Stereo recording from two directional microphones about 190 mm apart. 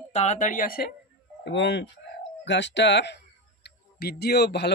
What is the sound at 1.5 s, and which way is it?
Speech, 65° left (ahead or behind).